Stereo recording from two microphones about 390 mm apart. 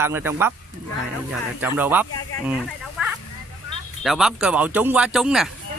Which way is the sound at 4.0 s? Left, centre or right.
Centre.